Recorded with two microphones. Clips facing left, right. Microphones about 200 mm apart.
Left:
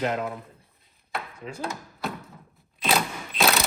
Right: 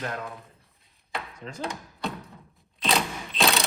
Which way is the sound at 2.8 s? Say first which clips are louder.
Left 1 dB; centre (ahead or behind).